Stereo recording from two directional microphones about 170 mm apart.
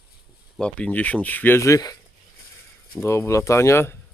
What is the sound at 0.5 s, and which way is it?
Speech, 5° left (ahead or behind).